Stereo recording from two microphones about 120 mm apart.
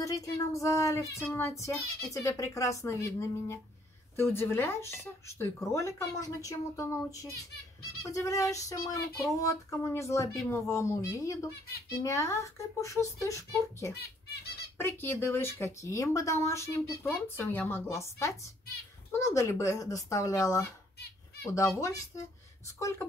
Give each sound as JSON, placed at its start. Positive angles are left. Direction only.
{"t": 0.0, "sound": "speech", "side_deg": 30}